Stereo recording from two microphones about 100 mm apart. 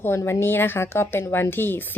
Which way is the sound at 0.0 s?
25° left (ahead or behind).